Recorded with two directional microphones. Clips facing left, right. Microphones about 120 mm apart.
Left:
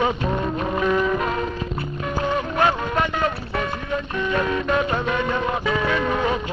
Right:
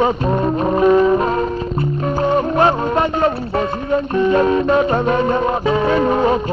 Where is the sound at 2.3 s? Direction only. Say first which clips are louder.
Right 6 dB; 35° right (ahead or behind).